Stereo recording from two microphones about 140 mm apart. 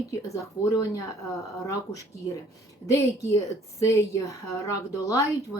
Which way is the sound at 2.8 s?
25° left (ahead or behind).